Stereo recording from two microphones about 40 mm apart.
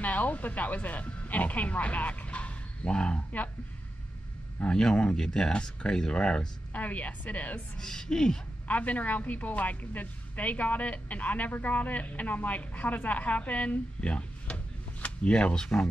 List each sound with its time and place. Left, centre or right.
0.0 s speech: left
4.6 s speech: centre
6.7 s a woman's voice: left
7.7 s speech: centre
8.6 s a woman's voice: left